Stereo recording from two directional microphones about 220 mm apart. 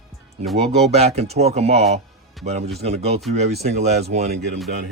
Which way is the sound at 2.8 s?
30° right (ahead or behind).